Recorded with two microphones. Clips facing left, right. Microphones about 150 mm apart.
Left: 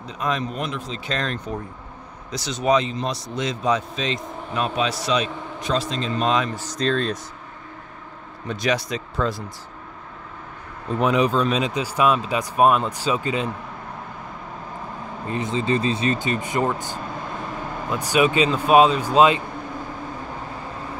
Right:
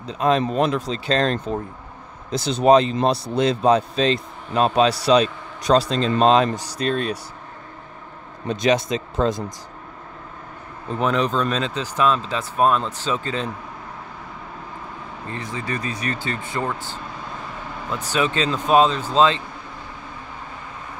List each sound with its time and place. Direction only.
0.0 s a man's voice: 30° right (ahead or behind)
6.5 s speech: 10° right (ahead or behind)
8.5 s speech: 20° right (ahead or behind)
11.0 s speech: 10° left (ahead or behind)
15.2 s speech: 20° left (ahead or behind)